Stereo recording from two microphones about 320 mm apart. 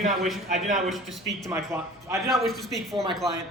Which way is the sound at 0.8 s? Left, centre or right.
Centre.